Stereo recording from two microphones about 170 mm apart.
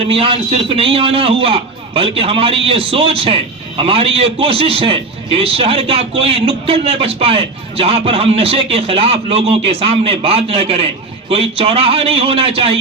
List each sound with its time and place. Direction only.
0.1 s a man's voice: 35° right (ahead or behind)